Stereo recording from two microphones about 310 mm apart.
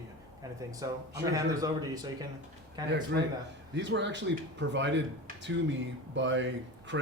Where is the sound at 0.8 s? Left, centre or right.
Centre.